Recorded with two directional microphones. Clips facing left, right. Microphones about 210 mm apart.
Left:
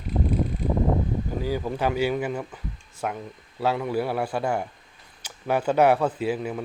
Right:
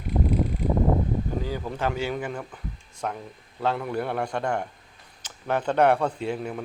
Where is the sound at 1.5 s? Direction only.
10° left (ahead or behind).